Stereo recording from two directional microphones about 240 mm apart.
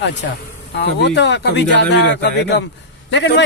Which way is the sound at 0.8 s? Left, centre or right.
Left.